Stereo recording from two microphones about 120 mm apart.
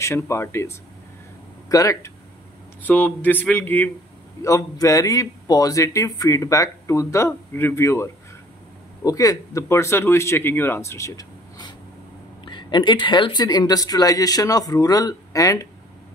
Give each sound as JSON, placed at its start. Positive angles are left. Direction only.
{"t": 0.0, "sound": "a man's voice", "side_deg": 20}
{"t": 2.8, "sound": "speech", "side_deg": 15}
{"t": 4.4, "sound": "a man's voice", "side_deg": 25}